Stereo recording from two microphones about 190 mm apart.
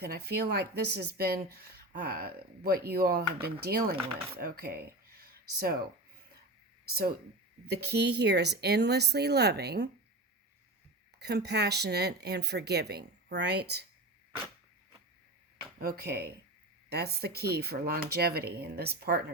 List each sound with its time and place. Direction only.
0.0 s speech: 55° right (ahead or behind)
6.9 s speech: 55° right (ahead or behind)
11.2 s speech: 60° right (ahead or behind)
15.8 s speech: 55° right (ahead or behind)